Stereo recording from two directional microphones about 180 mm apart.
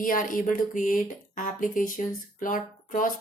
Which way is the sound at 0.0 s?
50° left (ahead or behind).